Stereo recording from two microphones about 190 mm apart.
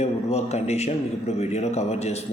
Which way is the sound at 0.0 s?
35° left (ahead or behind).